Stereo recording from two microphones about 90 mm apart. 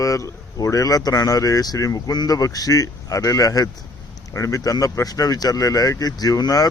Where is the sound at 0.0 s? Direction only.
35° left (ahead or behind).